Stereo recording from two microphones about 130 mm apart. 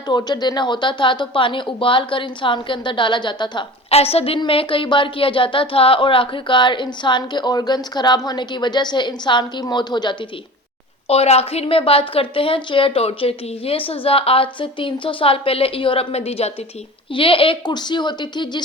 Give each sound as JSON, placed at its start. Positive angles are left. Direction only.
{"t": 0.1, "sound": "speech", "side_deg": 30}
{"t": 3.8, "sound": "a woman's voice", "side_deg": 50}
{"t": 11.1, "sound": "a woman's voice", "side_deg": 50}